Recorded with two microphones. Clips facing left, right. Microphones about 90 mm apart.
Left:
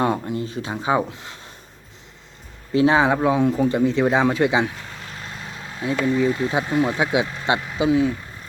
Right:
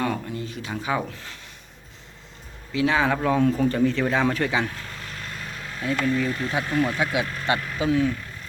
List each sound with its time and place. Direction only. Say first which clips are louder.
0.0 s speech: left 5 dB; 25° left (ahead or behind)
2.7 s speech: left 5 dB; 30° left (ahead or behind)
3.1 s speech: left 3 dB; 15° left (ahead or behind)